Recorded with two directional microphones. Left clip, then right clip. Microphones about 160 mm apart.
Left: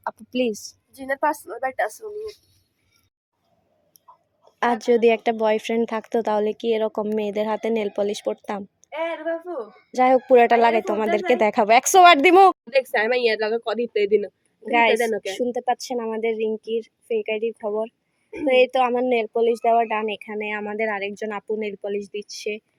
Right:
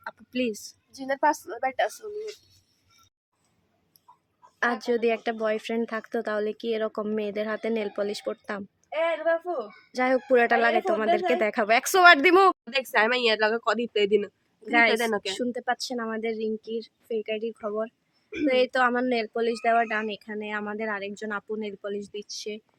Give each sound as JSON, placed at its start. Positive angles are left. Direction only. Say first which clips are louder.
{"t": 0.3, "sound": "speech", "louder": "left 5 dB", "side_deg": 15}
{"t": 4.6, "sound": "speech", "louder": "left 7 dB", "side_deg": 25}
{"t": 8.9, "sound": "speech", "louder": "right 2 dB", "side_deg": 35}
{"t": 9.9, "sound": "a woman's voice", "louder": "left 7 dB", "side_deg": 20}
{"t": 12.7, "sound": "speech", "louder": "left 3 dB", "side_deg": -15}
{"t": 15.4, "sound": "speech", "louder": "left 5 dB", "side_deg": 5}
{"t": 16.0, "sound": "speech", "louder": "left 5 dB", "side_deg": -50}
{"t": 16.2, "sound": "a woman's voice", "louder": "left 6 dB", "side_deg": 5}
{"t": 18.6, "sound": "speech", "louder": "left 3 dB", "side_deg": -45}
{"t": 18.9, "sound": "speech", "louder": "left 6 dB", "side_deg": 0}